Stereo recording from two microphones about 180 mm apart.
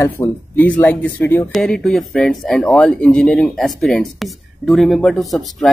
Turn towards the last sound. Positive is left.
turn(degrees=0)  # may be behind; listen again after turning